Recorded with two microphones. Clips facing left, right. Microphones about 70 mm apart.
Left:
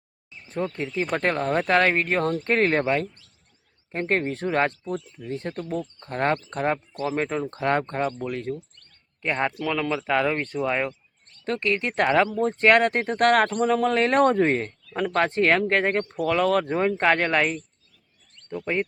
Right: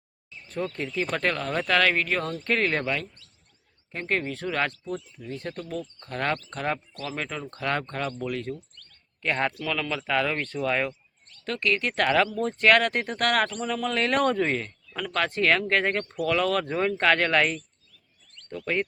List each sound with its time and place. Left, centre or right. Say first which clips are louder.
0.4 s speech: left 2 dB; left
8.8 s a sound: left 1 dB; left
9.6 s speech: left 4 dB; left